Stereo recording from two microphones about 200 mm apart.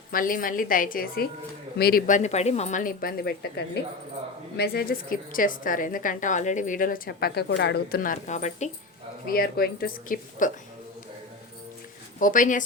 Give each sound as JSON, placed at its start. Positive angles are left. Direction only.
{"t": 0.1, "sound": "a woman's voice", "side_deg": 45}
{"t": 9.2, "sound": "a woman's voice", "side_deg": 50}
{"t": 12.2, "sound": "speech", "side_deg": 40}